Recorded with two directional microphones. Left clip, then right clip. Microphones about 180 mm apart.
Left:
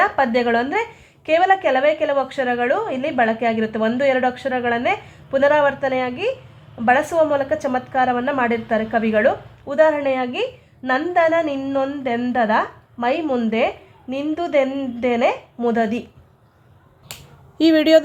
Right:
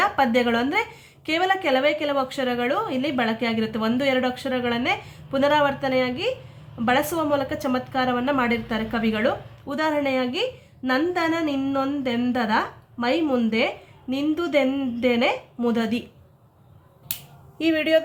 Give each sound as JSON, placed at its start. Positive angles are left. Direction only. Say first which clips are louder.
{"t": 0.0, "sound": "a woman's voice", "louder": "left 3 dB", "side_deg": 35}
{"t": 17.6, "sound": "a woman's voice", "louder": "left 7 dB", "side_deg": 40}